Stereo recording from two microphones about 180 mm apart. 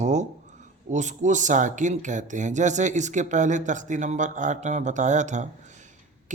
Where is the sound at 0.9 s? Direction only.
40° right (ahead or behind).